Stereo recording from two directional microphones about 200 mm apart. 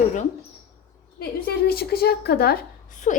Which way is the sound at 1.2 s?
50° left (ahead or behind).